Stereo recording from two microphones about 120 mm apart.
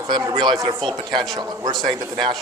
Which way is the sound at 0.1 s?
40° right (ahead or behind).